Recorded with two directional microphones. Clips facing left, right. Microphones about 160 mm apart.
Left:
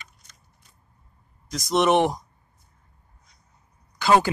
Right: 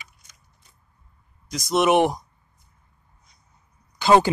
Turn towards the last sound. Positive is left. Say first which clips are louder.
# right 2 dB
turn(degrees=-20)  # may be behind; listen again after turning